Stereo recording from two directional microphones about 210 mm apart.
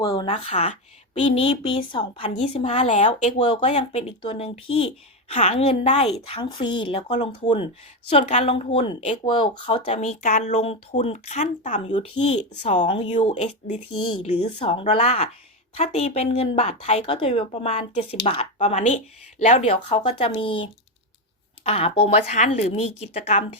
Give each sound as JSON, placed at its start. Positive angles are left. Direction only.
{"t": 0.1, "sound": "speech", "side_deg": 25}
{"t": 13.9, "sound": "speech", "side_deg": 90}
{"t": 14.2, "sound": "speech", "side_deg": 30}